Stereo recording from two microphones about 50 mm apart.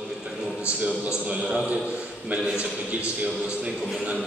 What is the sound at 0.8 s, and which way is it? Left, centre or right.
A man's voice, right.